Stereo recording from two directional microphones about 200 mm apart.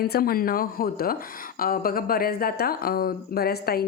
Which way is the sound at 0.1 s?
50° left (ahead or behind).